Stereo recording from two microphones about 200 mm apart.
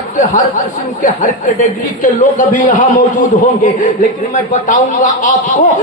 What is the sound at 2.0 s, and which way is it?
Speech, 40° left (ahead or behind).